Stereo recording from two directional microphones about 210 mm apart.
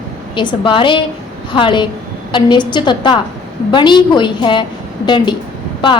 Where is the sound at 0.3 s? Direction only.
25° left (ahead or behind).